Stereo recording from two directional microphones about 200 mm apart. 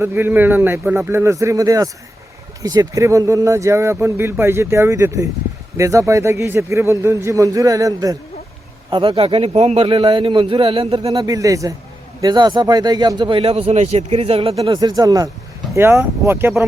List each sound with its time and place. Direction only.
0.0 s a man's voice: 10° right (ahead or behind); by 14.8 s 30° right (ahead or behind)
14.8 s a man's voice: 20° right (ahead or behind)